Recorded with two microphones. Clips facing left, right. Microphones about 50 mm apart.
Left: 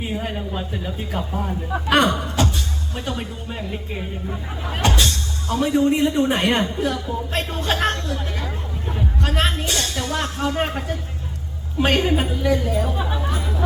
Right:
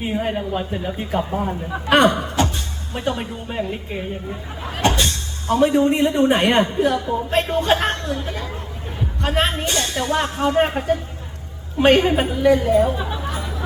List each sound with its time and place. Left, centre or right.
0.0 s speech: centre
9.2 s speech: centre
12.6 s speech: right